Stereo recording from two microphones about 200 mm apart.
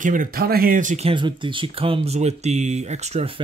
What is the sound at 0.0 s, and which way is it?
Speech, 40° right (ahead or behind).